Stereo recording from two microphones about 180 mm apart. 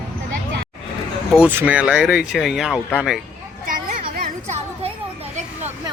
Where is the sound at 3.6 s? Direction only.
50° right (ahead or behind).